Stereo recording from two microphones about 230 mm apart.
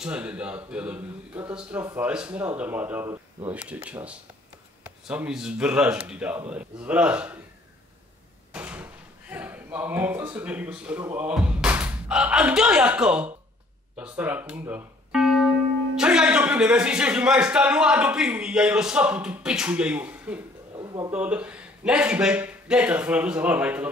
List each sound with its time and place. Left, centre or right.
0.0 s a man's voice: centre
8.5 s a man's voice: centre
20.7 s a sound: centre
21.1 s a man's voice: centre